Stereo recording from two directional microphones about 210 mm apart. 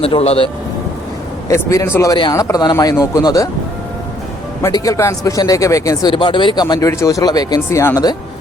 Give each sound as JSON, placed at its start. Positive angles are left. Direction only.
{"t": 0.0, "sound": "speech", "side_deg": 30}
{"t": 1.5, "sound": "speech", "side_deg": 15}
{"t": 4.6, "sound": "speech", "side_deg": 15}